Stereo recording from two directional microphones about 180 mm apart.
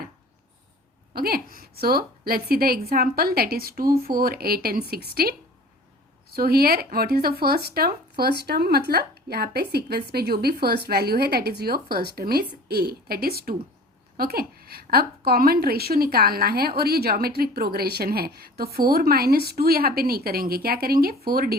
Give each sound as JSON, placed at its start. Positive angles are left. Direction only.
{"t": 1.1, "sound": "a woman's voice", "side_deg": -55}